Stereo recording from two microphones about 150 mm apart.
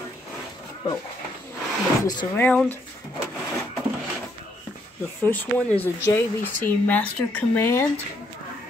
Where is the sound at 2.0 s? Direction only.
30° left (ahead or behind).